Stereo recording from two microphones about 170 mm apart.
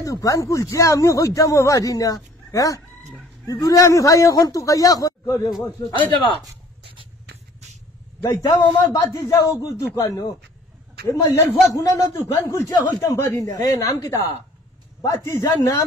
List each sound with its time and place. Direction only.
0.0 s speech: 20° left (ahead or behind)
8.2 s a man's voice: 20° left (ahead or behind)